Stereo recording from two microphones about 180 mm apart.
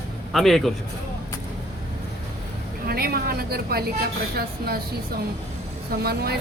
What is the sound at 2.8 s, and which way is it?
Speech, 55° right (ahead or behind).